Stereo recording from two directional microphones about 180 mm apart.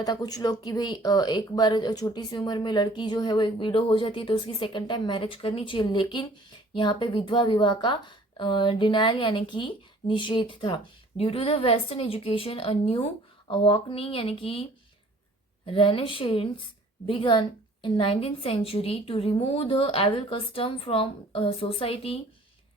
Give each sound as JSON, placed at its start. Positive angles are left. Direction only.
{"t": 0.0, "sound": "a woman's voice", "side_deg": 20}